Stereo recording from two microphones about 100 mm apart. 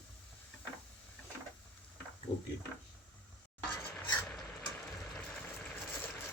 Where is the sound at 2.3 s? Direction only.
60° left (ahead or behind).